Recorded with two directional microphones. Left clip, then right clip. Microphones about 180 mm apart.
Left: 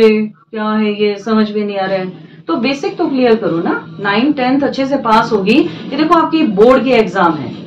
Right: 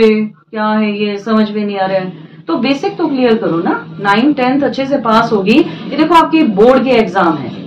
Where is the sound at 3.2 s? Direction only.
5° right (ahead or behind).